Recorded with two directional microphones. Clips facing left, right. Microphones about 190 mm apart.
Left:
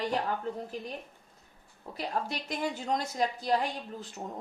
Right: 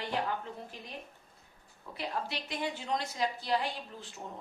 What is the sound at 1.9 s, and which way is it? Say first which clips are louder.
A woman's voice: left 3 dB; 45° left (ahead or behind).